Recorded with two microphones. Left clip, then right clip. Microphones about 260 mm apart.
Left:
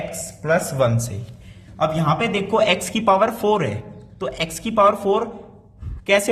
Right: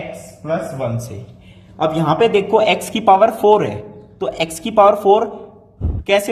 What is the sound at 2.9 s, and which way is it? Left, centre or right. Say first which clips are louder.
A woman's voice: right 5 dB; centre.